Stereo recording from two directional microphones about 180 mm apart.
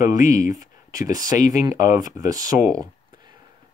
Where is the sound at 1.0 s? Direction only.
20° right (ahead or behind).